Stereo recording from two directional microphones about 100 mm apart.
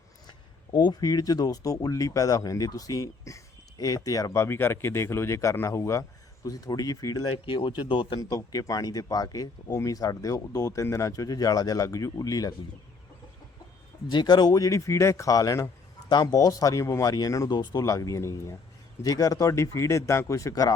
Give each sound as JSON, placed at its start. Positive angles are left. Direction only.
{"t": 0.3, "sound": "speech", "side_deg": 50}
{"t": 7.4, "sound": "a man's voice", "side_deg": 55}
{"t": 8.2, "sound": "speech", "side_deg": 35}
{"t": 14.1, "sound": "speech", "side_deg": 45}